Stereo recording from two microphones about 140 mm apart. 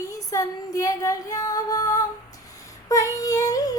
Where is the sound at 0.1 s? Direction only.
25° left (ahead or behind).